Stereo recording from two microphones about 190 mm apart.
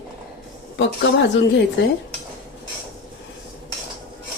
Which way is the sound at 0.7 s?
70° left (ahead or behind).